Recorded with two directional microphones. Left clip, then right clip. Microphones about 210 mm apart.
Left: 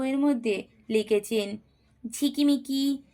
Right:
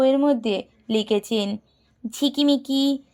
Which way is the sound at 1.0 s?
35° right (ahead or behind).